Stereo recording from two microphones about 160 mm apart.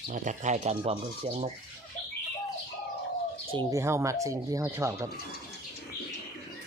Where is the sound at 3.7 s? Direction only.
15° right (ahead or behind).